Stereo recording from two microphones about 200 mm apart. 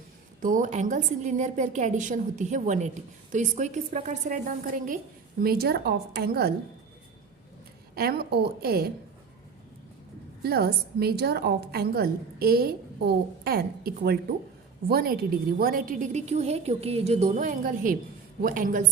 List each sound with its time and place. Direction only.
0.4 s a woman's voice: 40° right (ahead or behind)
7.9 s a woman's voice: 50° right (ahead or behind)
10.4 s a woman's voice: 50° right (ahead or behind)